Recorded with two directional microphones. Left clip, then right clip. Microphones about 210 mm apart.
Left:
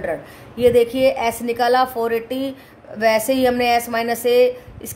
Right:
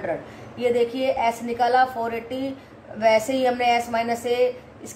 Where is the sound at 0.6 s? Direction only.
55° left (ahead or behind).